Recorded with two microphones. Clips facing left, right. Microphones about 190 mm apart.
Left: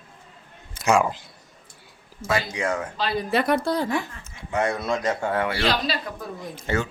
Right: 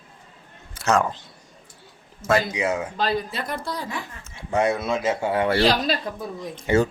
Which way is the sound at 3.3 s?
70° left (ahead or behind).